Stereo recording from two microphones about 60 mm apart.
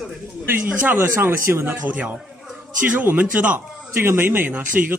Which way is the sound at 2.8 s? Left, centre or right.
Right.